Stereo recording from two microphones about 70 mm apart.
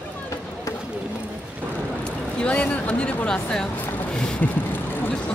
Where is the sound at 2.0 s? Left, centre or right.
Centre.